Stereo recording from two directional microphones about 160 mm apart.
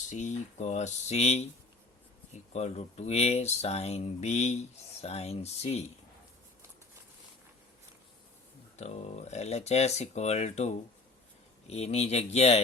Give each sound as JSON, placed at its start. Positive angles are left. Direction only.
{"t": 0.1, "sound": "speech", "side_deg": 50}
{"t": 2.5, "sound": "speech", "side_deg": 40}
{"t": 8.7, "sound": "speech", "side_deg": 40}